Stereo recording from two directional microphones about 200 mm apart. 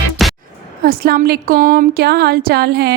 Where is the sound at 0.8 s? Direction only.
50° right (ahead or behind).